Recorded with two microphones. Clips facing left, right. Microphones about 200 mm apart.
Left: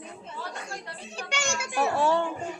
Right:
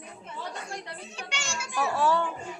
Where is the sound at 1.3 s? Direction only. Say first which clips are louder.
Left 5 dB; 55° left (ahead or behind).